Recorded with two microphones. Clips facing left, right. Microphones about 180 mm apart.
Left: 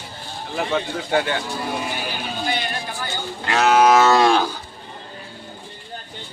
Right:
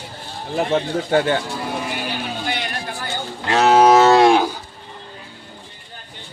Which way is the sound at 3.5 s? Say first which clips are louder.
Right 3 dB; 30° right (ahead or behind).